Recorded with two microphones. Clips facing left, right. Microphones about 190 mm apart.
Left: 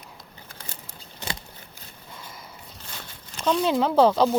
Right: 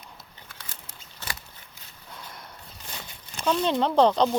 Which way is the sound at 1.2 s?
15° left (ahead or behind).